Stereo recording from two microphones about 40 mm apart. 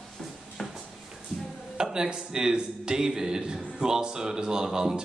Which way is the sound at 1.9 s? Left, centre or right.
Centre.